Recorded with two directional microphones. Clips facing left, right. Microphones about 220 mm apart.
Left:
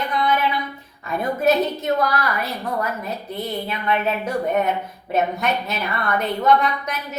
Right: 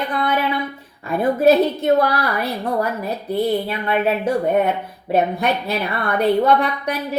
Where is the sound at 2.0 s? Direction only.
30° right (ahead or behind).